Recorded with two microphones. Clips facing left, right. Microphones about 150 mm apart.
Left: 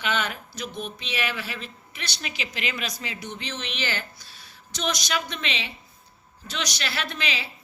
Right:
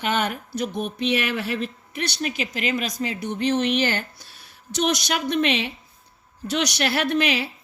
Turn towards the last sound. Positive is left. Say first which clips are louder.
# right 9 dB
turn(degrees=-60)  # may be behind; listen again after turning